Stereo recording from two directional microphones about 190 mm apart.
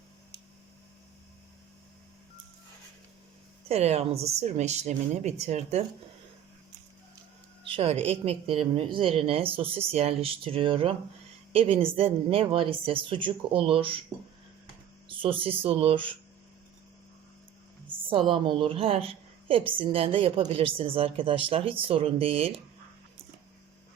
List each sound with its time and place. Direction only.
3.7 s a woman's voice: 35° right (ahead or behind)
7.7 s a woman's voice: 30° right (ahead or behind)
15.0 s a woman's voice: 25° right (ahead or behind)
18.1 s a woman's voice: 25° right (ahead or behind)